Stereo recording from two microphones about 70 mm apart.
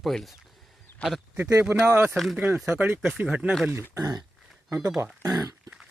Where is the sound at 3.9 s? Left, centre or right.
Right.